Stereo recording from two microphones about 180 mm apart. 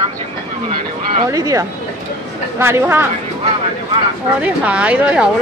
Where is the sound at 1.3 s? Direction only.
20° right (ahead or behind).